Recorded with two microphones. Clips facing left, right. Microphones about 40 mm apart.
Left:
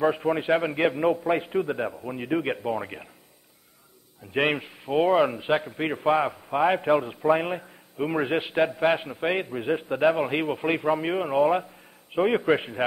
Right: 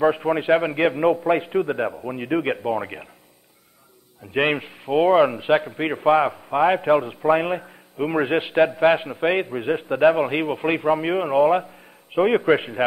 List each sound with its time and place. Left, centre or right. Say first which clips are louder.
0.0 s a man's voice: right 4 dB; centre
4.3 s a man's voice: right 3 dB; centre